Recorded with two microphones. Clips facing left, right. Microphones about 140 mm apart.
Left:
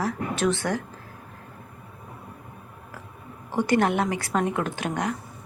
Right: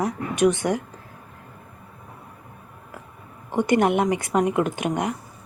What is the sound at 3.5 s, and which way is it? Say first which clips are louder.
A woman's voice: right 3 dB; 20° right (ahead or behind).